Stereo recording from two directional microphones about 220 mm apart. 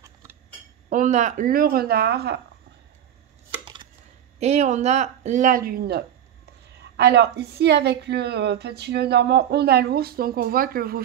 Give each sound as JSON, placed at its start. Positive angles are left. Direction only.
{"t": 0.0, "sound": "chink", "side_deg": -15}
{"t": 0.8, "sound": "speech", "side_deg": -35}
{"t": 3.6, "sound": "chopping", "side_deg": -20}
{"t": 4.4, "sound": "a woman's voice", "side_deg": -30}